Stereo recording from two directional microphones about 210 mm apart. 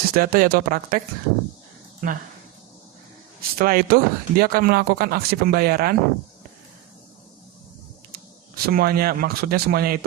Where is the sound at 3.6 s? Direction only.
45° right (ahead or behind).